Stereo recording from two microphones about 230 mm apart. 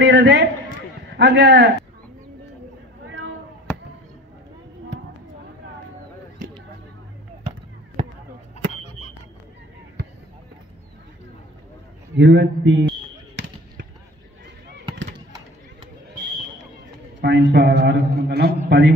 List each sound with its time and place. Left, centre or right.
0.0 s a man's voice: right
3.1 s a sound: right
12.2 s a man's voice: right
17.2 s a man's voice: right